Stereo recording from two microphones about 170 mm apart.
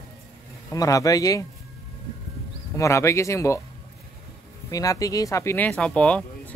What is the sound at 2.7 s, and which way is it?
Speech, 15° left (ahead or behind).